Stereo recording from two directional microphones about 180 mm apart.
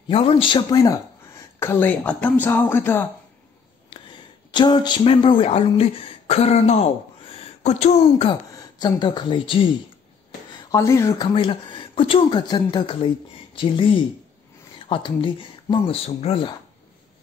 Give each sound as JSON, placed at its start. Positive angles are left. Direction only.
{"t": 0.1, "sound": "speech", "side_deg": 30}
{"t": 3.9, "sound": "speech", "side_deg": 25}
{"t": 8.3, "sound": "a woman's voice", "side_deg": 20}
{"t": 10.7, "sound": "speech", "side_deg": 15}